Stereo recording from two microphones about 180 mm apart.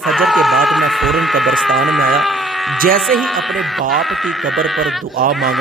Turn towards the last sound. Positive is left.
turn(degrees=0)  # may be behind; listen again after turning